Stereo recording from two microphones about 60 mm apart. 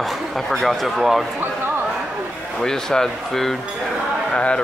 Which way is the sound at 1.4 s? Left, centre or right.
Right.